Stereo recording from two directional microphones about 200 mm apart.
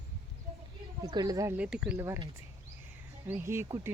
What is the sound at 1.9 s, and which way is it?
Speech, 15° right (ahead or behind).